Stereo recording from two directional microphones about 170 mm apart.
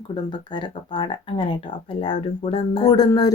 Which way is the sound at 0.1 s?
25° left (ahead or behind).